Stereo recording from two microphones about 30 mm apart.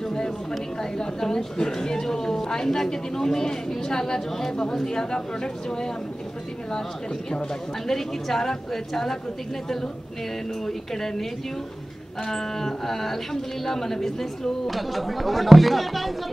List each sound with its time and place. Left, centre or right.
0.1 s a woman's voice: left
7.8 s speech: centre
12.3 s speech: centre
14.7 s speech: centre